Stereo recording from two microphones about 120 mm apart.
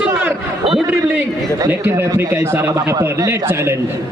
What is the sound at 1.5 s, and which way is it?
A man's voice, 25° right (ahead or behind).